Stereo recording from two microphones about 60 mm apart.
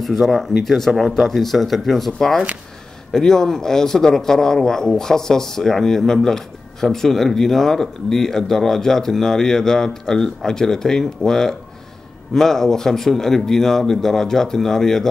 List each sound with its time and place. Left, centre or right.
0.0 s speech: centre